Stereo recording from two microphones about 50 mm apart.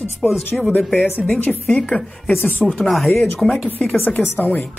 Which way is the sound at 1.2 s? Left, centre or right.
Left.